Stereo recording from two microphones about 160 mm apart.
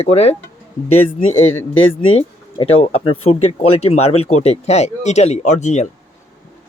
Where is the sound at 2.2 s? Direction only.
35° left (ahead or behind).